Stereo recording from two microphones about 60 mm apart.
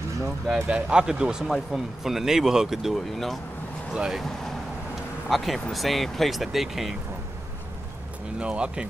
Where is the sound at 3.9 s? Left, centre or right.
Centre.